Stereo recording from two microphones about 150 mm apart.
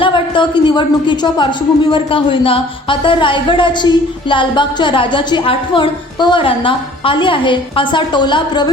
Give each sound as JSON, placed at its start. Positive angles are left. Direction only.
{"t": 0.0, "sound": "speech", "side_deg": 35}